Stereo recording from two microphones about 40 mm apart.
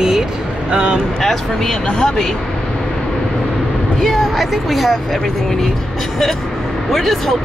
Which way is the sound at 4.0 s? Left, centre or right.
Centre.